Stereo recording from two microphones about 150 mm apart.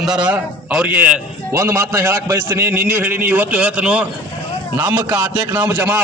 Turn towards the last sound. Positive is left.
turn(degrees=-15)  # may be behind; listen again after turning